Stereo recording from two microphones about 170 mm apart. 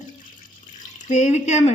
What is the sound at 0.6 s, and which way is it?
Water, 45° left (ahead or behind).